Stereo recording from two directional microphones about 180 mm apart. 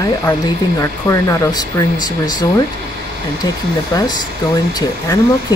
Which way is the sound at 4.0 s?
20° left (ahead or behind).